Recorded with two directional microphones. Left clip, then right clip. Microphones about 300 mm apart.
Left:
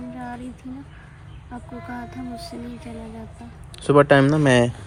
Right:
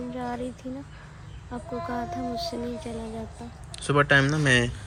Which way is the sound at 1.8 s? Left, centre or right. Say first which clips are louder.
Right 4 dB; right.